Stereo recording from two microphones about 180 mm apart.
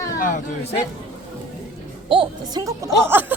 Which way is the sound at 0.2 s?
45° left (ahead or behind).